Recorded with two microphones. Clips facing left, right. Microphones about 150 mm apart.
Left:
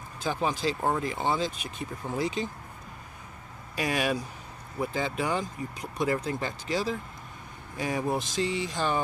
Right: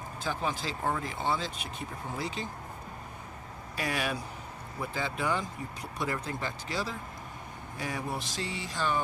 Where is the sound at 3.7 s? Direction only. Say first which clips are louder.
Left 5 dB; 20° left (ahead or behind).